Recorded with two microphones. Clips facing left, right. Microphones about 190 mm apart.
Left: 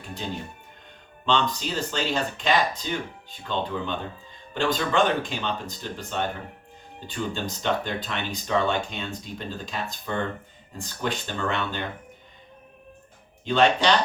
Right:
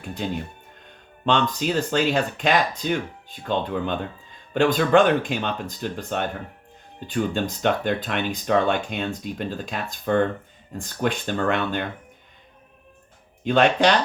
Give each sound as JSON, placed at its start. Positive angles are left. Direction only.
{"t": 1.2, "sound": "speech", "side_deg": -55}
{"t": 13.4, "sound": "speech", "side_deg": -55}